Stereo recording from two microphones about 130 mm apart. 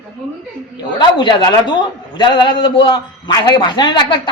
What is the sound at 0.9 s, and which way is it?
A man's voice, 35° left (ahead or behind).